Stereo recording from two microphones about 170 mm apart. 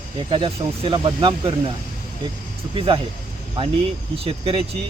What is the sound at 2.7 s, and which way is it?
Speech, 30° right (ahead or behind).